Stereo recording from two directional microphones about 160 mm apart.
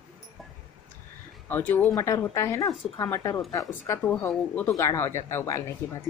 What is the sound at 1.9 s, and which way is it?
A woman's voice, 20° left (ahead or behind).